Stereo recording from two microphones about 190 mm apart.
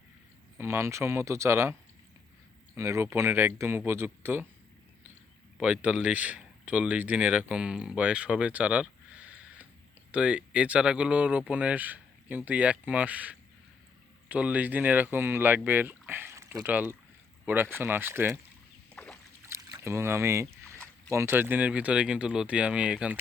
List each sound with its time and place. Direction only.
0.6 s speech: 15° right (ahead or behind)
2.7 s speech: 15° right (ahead or behind)
5.5 s speech: 5° right (ahead or behind)
19.4 s boat: 15° right (ahead or behind)
21.1 s speech: 15° right (ahead or behind)